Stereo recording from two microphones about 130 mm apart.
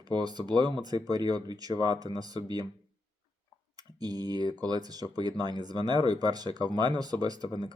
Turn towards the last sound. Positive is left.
turn(degrees=-30)  # may be behind; listen again after turning